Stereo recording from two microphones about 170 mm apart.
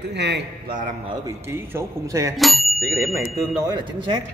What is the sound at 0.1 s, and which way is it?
Speech, 90° right.